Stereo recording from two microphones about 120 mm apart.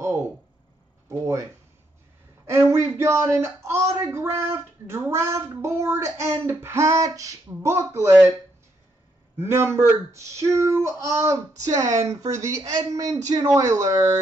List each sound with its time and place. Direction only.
1.0 s a sound: 25° right (ahead or behind)
2.4 s speech: 20° right (ahead or behind)
9.4 s speech: 20° right (ahead or behind)